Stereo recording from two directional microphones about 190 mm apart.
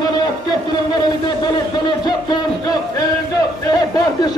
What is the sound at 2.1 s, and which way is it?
A man's voice, 20° left (ahead or behind).